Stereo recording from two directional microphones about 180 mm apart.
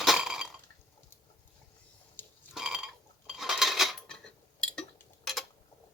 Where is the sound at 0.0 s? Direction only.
Centre (ahead or behind).